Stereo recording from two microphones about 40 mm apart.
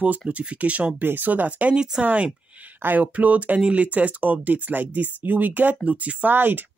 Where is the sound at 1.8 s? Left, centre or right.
Right.